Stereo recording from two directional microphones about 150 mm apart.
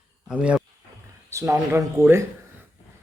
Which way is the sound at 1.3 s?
20° right (ahead or behind).